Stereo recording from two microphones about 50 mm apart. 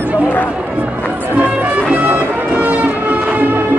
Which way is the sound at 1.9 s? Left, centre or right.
Right.